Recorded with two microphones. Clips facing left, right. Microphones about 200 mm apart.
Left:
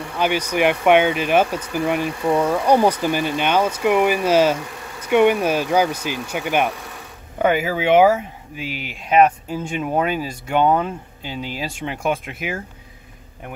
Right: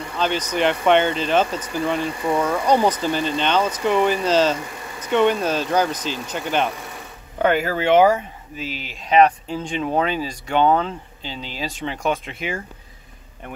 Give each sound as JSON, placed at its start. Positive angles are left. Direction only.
{"t": 0.2, "sound": "speech", "side_deg": 10}